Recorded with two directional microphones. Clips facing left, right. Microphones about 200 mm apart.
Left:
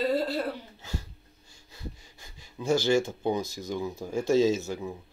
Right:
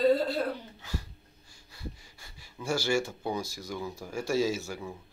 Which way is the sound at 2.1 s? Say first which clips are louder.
Left 4 dB; 20° left (ahead or behind).